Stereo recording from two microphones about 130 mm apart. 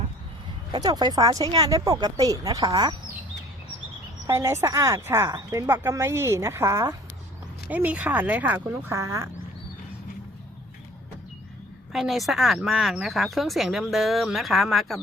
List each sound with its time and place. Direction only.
0.7 s speech: 30° right (ahead or behind)
4.3 s speech: 20° right (ahead or behind)
7.7 s speech: 10° right (ahead or behind)
11.9 s speech: centre (ahead or behind)